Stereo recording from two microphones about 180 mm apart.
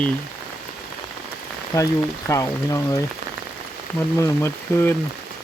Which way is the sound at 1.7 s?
15° left (ahead or behind).